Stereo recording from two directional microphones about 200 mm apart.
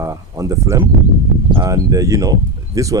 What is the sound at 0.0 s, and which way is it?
Speech, 15° right (ahead or behind).